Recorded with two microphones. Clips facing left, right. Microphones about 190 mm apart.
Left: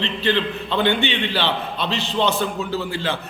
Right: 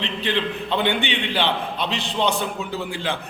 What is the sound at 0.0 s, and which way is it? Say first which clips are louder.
A man's voice: left 3 dB; 15° right (ahead or behind).